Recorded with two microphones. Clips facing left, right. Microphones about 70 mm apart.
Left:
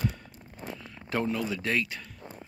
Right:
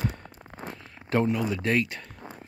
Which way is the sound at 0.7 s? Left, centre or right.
Right.